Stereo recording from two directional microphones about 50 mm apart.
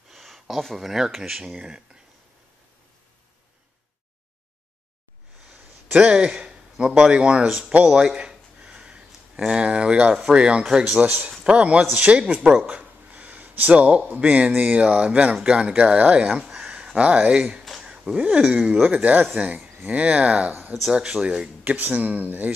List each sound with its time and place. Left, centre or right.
0.1 s speech: centre
5.9 s speech: centre
7.4 s speech: centre
7.8 s a sound: centre
9.5 s speech: right
12.6 s a sound: right
14.1 s speech: right
21.7 s speech: right